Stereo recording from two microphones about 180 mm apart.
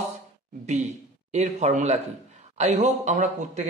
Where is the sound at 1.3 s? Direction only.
40° right (ahead or behind).